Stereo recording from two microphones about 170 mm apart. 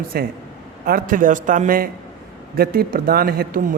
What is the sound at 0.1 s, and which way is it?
A man's voice, 65° right (ahead or behind).